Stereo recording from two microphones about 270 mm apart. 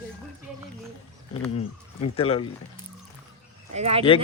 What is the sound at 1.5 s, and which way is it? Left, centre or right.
Speech, left.